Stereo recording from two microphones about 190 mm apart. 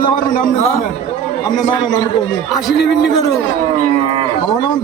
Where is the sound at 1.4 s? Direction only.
20° left (ahead or behind).